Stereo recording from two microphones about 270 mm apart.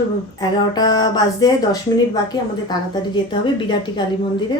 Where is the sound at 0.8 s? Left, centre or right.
Centre.